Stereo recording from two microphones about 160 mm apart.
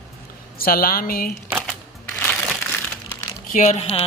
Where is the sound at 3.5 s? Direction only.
45° left (ahead or behind).